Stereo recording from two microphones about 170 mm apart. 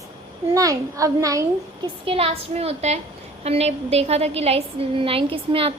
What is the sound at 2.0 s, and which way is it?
A woman's voice, 35° right (ahead or behind).